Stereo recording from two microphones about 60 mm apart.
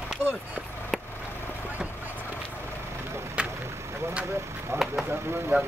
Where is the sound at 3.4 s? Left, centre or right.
Centre.